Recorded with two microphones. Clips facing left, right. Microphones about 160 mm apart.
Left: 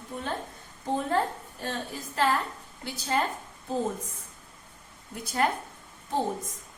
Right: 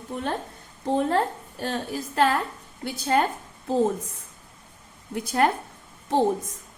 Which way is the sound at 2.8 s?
55° right (ahead or behind).